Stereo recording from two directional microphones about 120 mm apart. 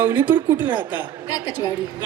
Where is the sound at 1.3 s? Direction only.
30° left (ahead or behind).